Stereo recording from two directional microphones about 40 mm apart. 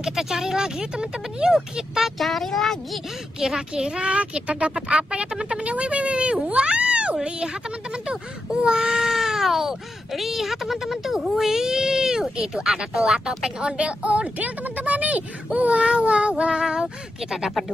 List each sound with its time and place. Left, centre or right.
0.0 s speech: centre
2.1 s speech: centre
3.3 s speech: centre
6.4 s cat: right
7.2 s speech: right
9.0 s speech: centre; by 15.8 s right
15.8 s speech: right